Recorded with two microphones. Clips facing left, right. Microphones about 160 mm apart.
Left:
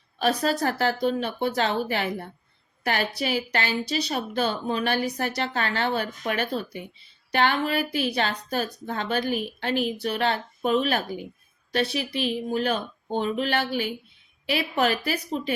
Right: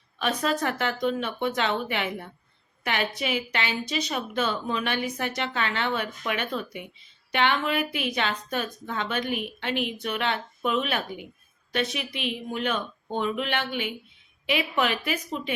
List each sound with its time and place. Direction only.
0.2 s speech: 35° left (ahead or behind)